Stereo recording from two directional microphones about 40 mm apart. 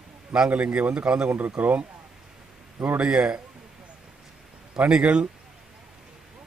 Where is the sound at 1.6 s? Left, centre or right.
Right.